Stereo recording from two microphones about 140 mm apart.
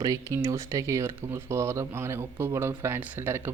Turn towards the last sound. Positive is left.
turn(degrees=-15)  # may be behind; listen again after turning